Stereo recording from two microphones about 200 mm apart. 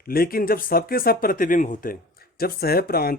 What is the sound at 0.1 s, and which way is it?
Speech, 45° left (ahead or behind).